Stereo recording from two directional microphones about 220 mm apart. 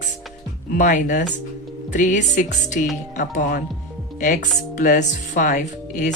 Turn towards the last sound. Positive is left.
turn(degrees=35)  # may be behind; listen again after turning